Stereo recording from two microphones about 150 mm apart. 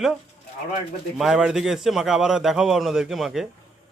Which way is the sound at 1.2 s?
Centre (ahead or behind).